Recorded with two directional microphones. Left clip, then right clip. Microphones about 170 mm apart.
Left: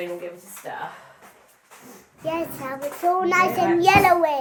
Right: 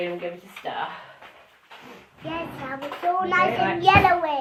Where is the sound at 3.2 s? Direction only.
50° left (ahead or behind).